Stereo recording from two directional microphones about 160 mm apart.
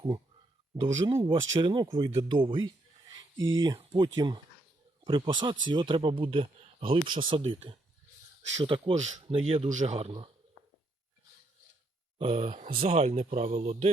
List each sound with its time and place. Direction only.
0.8 s speech: 30° right (ahead or behind)
9.0 s speech: 45° right (ahead or behind)
9.3 s speech: 35° right (ahead or behind)
9.6 s speech: 50° right (ahead or behind)
12.2 s speech: 35° right (ahead or behind)